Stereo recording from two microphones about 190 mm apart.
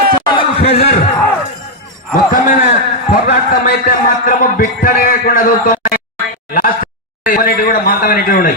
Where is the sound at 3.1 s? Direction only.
50° left (ahead or behind).